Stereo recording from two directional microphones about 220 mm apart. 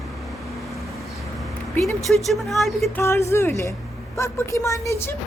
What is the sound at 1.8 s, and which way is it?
Speech, centre (ahead or behind).